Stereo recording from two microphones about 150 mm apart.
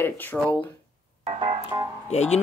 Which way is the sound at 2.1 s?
50° left (ahead or behind).